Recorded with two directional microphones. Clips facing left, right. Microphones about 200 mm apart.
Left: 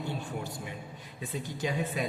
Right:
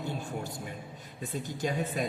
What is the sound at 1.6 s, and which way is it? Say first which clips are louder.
Speech: even; 45° right (ahead or behind).